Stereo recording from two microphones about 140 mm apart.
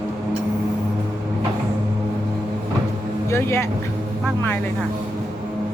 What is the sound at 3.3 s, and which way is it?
Speech, 15° left (ahead or behind).